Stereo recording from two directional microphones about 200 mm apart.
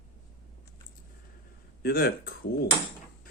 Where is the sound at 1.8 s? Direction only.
50° left (ahead or behind).